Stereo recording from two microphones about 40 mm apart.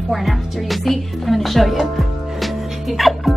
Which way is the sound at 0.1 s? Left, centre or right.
Centre.